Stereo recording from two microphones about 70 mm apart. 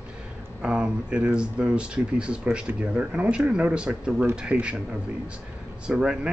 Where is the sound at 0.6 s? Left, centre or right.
Centre.